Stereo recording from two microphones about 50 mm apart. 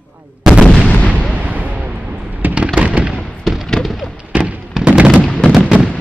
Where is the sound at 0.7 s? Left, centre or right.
Centre.